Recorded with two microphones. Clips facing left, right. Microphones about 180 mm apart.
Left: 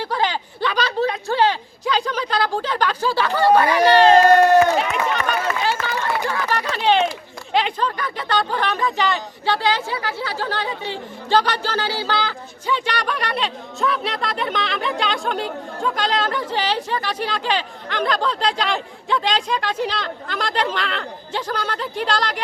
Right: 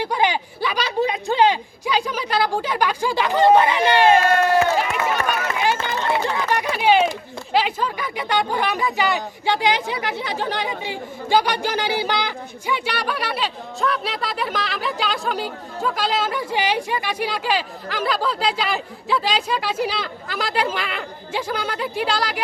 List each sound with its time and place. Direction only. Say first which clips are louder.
0.0 s speech: right 2 dB; 15° right (ahead or behind)
4.8 s run: even; 5° right (ahead or behind)
5.7 s a sound: right 1 dB; 25° right (ahead or behind); by 7.1 s 10° right (ahead or behind)
7.5 s speech: even; 5° right (ahead or behind)